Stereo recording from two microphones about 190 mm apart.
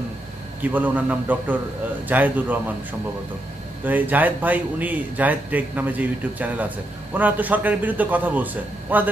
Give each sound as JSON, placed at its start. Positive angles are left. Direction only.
{"t": 0.6, "sound": "speech", "side_deg": -10}
{"t": 3.8, "sound": "speech", "side_deg": -10}